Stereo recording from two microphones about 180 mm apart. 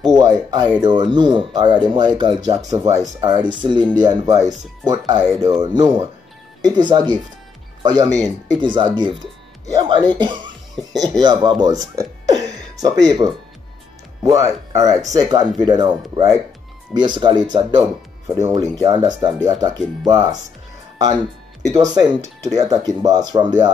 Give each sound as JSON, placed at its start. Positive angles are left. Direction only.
{"t": 0.0, "sound": "speech", "side_deg": -20}
{"t": 11.9, "sound": "a sound", "side_deg": -20}
{"t": 14.2, "sound": "speech", "side_deg": -15}
{"t": 22.2, "sound": "speech", "side_deg": -20}